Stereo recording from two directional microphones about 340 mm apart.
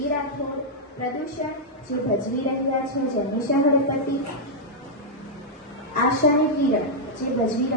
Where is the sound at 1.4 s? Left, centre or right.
Left.